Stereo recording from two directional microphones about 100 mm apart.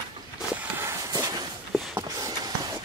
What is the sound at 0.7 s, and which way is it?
Walk, 30° right (ahead or behind).